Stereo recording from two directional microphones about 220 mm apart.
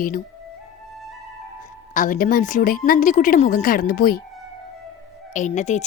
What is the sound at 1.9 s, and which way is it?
Speech, 35° left (ahead or behind).